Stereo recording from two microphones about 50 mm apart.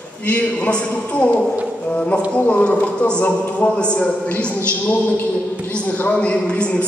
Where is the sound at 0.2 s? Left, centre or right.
Left.